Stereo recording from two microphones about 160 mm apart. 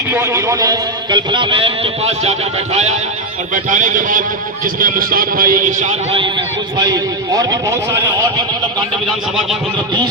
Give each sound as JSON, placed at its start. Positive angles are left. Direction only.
{"t": 0.1, "sound": "a man's voice", "side_deg": -15}
{"t": 3.5, "sound": "speech", "side_deg": -55}
{"t": 6.1, "sound": "a man's voice", "side_deg": -30}
{"t": 9.0, "sound": "speech", "side_deg": 0}